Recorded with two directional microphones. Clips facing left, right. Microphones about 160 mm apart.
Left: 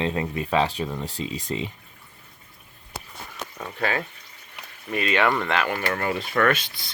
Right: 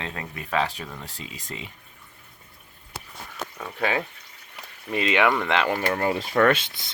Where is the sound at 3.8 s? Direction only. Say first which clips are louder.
Right 1 dB; 15° right (ahead or behind).